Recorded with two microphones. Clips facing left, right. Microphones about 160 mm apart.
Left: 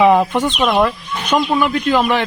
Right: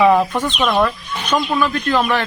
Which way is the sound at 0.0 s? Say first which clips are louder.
Left 2 dB; 15° left (ahead or behind).